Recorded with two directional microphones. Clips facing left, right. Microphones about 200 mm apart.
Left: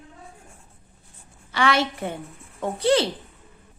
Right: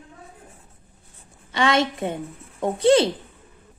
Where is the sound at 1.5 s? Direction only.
20° right (ahead or behind).